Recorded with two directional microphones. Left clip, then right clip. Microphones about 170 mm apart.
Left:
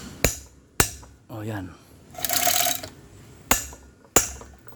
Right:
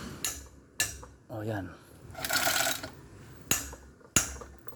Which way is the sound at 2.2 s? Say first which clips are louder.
Left 4 dB; 50° left (ahead or behind).